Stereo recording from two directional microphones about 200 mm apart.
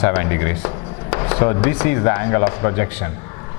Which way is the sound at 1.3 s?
15° left (ahead or behind).